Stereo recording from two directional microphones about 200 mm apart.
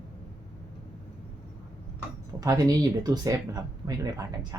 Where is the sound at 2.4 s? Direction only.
20° right (ahead or behind).